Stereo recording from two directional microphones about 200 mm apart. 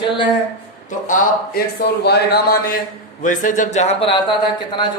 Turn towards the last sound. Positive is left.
turn(degrees=25)  # may be behind; listen again after turning